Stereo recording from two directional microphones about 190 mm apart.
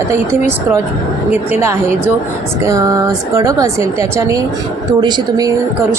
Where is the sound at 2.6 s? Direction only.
15° right (ahead or behind).